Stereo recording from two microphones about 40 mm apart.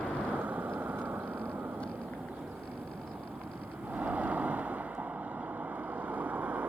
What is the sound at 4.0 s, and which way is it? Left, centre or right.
Vehicle, right.